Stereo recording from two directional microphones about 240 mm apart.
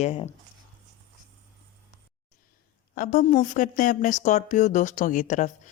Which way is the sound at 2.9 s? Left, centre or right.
Left.